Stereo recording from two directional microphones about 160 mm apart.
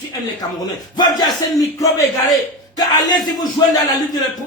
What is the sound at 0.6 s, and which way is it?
Speech, 25° left (ahead or behind).